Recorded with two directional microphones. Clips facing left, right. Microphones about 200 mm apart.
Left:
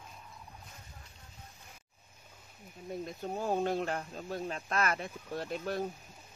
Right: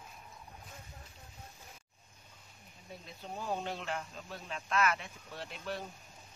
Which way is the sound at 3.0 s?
45° left (ahead or behind).